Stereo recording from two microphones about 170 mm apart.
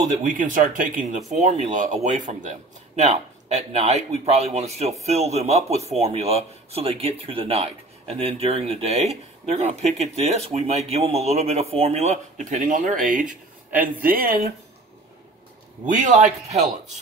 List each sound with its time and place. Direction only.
0.2 s speech: 50° right (ahead or behind)
15.9 s speech: 45° right (ahead or behind)